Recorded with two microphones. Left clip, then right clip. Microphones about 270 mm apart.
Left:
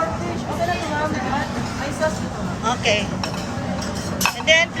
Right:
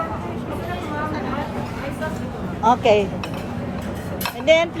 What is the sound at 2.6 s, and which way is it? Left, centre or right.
Speech, centre.